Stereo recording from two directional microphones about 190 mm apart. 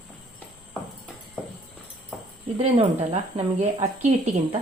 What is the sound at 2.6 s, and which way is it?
A woman's voice, 35° right (ahead or behind).